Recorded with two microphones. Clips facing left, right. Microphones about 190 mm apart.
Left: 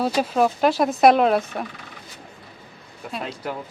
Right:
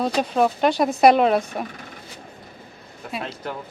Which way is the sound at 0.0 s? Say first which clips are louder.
Even; 5° left (ahead or behind).